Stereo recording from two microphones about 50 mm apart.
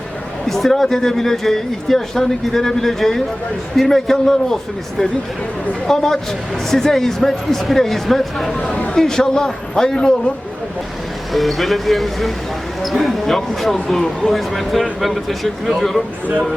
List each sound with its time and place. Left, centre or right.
0.4 s speech: centre
8.6 s speech: left
11.3 s speech: centre